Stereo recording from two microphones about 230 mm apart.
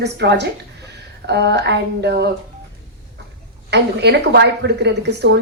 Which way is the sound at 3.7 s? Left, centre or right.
Right.